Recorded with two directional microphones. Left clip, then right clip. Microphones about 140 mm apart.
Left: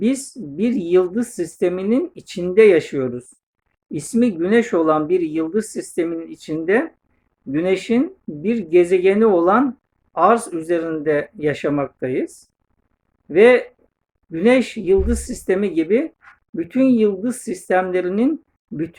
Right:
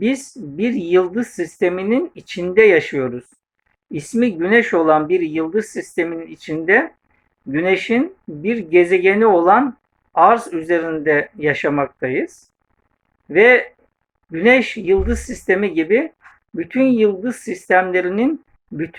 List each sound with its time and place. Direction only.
0.0 s speech: 15° left (ahead or behind)